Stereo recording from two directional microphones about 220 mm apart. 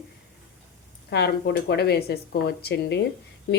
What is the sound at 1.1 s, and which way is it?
Speech, 50° left (ahead or behind).